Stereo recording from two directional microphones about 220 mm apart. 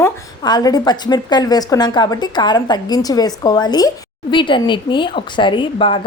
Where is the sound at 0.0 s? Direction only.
20° left (ahead or behind).